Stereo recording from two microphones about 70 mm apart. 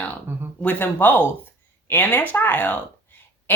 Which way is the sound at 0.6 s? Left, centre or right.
Left.